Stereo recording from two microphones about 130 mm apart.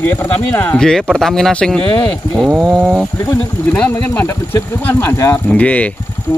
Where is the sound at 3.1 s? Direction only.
25° left (ahead or behind).